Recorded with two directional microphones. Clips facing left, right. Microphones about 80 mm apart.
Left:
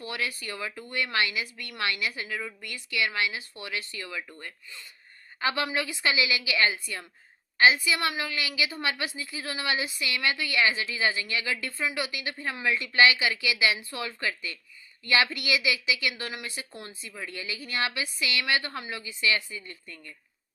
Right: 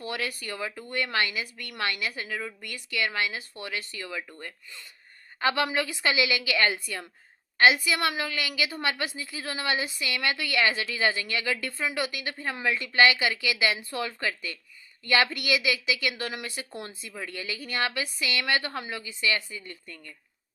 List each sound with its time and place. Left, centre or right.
0.0 s a woman's voice: right
5.4 s speech: right